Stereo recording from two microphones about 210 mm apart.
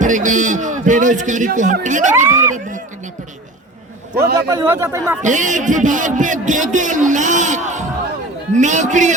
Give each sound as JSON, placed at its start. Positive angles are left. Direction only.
{"t": 0.0, "sound": "a man's voice", "side_deg": -35}
{"t": 2.1, "sound": "speech", "side_deg": -15}
{"t": 4.5, "sound": "speech", "side_deg": -10}
{"t": 5.2, "sound": "a man's voice", "side_deg": -35}